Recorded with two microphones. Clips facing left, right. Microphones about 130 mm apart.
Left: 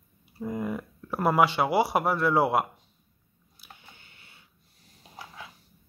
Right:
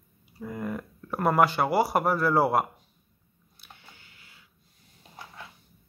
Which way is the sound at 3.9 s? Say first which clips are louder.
Even; 25° left (ahead or behind).